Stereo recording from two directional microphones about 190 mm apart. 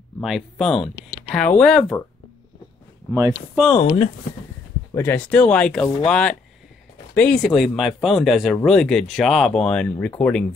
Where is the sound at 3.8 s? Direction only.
30° left (ahead or behind).